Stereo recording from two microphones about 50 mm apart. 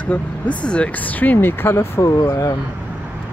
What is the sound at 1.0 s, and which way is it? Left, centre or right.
Speech, left.